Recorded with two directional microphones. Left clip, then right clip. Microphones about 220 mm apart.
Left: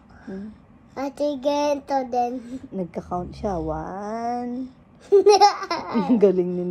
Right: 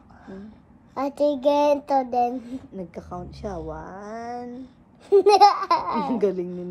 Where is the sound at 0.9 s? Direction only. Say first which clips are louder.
Right 3 dB; 15° right (ahead or behind).